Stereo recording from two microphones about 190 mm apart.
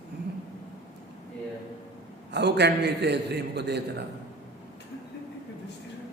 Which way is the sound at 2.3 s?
60° right (ahead or behind).